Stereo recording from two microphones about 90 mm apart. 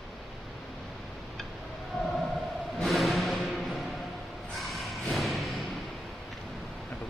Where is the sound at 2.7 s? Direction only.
Centre (ahead or behind).